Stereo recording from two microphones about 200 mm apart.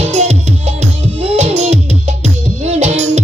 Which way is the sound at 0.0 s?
35° right (ahead or behind).